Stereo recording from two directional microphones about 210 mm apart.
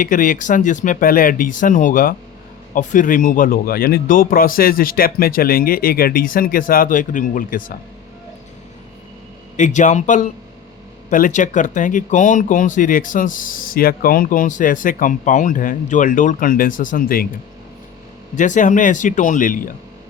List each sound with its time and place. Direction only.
0.0 s speech: 40° left (ahead or behind)
9.6 s speech: 35° left (ahead or behind)
18.3 s speech: 35° left (ahead or behind)